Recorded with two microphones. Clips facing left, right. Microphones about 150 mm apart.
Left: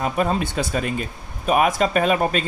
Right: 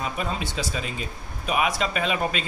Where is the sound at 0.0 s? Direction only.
50° left (ahead or behind).